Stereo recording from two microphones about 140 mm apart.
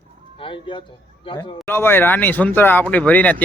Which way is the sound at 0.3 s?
40° left (ahead or behind).